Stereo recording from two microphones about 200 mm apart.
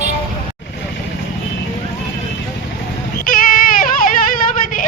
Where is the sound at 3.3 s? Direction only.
45° left (ahead or behind).